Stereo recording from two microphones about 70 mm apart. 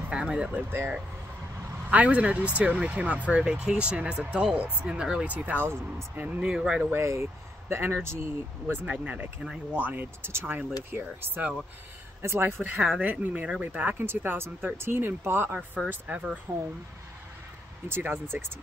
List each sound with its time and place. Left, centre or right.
0.1 s speech: centre
0.7 s speech: right
1.9 s speech: right
5.2 s speech: right
5.7 s speech: right
6.4 s speech: centre
6.9 s speech: right
8.8 s speech: centre; by 12.6 s right
13.0 s speech: right
17.8 s speech: right